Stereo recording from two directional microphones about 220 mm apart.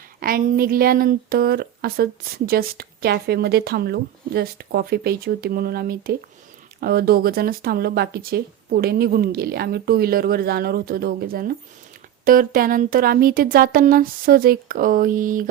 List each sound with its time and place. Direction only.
0.2 s a woman's voice: 40° right (ahead or behind)